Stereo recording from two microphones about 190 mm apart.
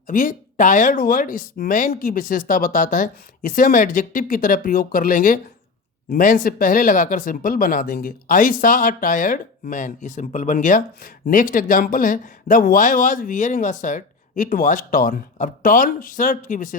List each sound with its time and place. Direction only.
0.1 s speech: 45° left (ahead or behind)